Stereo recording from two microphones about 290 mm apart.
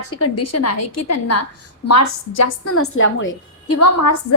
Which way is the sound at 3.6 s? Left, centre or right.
Left.